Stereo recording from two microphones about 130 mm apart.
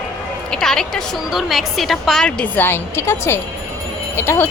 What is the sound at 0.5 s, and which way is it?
A woman's voice, 5° left (ahead or behind).